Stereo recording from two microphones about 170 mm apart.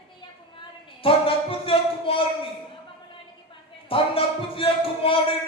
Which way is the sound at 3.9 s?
35° left (ahead or behind).